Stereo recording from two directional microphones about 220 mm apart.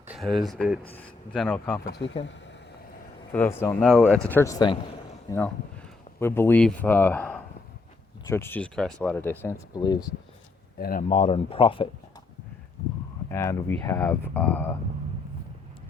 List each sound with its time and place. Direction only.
0.1 s speech: centre (ahead or behind)
1.8 s speech: 50° left (ahead or behind)
3.3 s speech: 10° left (ahead or behind)
10.8 s speech: 40° left (ahead or behind); by 11.9 s 25° left (ahead or behind)
13.3 s speech: 10° left (ahead or behind)